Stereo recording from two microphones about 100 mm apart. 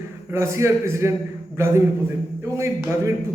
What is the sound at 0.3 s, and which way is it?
Speech, 30° right (ahead or behind).